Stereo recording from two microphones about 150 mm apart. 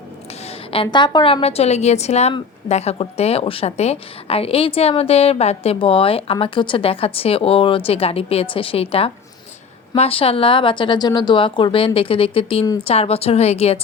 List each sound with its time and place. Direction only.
0.4 s a woman's voice: 35° left (ahead or behind)